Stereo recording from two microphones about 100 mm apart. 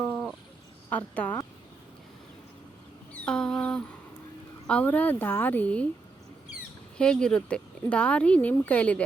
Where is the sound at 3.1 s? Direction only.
10° left (ahead or behind).